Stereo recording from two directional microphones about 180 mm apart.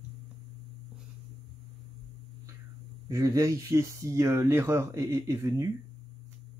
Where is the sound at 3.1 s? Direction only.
20° right (ahead or behind).